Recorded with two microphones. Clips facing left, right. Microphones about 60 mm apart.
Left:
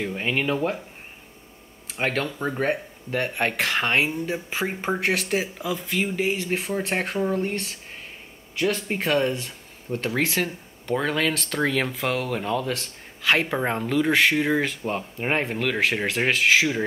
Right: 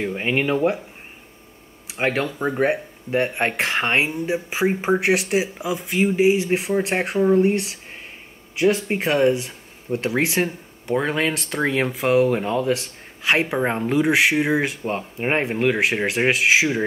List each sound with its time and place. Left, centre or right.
0.0 s speech: centre
1.9 s speech: centre